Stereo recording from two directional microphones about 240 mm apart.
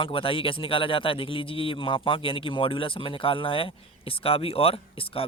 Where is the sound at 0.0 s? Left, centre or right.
Left.